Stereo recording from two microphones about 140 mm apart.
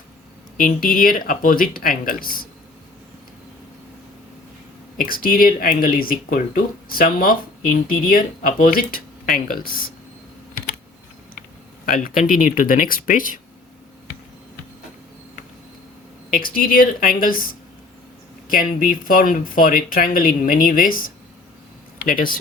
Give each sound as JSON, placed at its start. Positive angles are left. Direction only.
{"t": 0.5, "sound": "speech", "side_deg": 70}
{"t": 0.9, "sound": "speech", "side_deg": 90}
{"t": 4.9, "sound": "speech", "side_deg": 90}
{"t": 11.9, "sound": "speech", "side_deg": 80}
{"t": 16.3, "sound": "speech", "side_deg": 90}
{"t": 18.5, "sound": "speech", "side_deg": 75}